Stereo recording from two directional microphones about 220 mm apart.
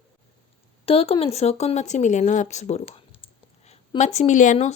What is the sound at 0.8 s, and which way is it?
Speech, 25° left (ahead or behind).